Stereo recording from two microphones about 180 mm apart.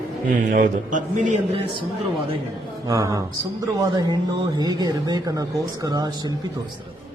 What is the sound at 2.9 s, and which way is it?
Speech, 15° right (ahead or behind).